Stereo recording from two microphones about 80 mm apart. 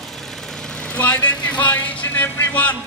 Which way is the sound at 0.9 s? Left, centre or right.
Centre.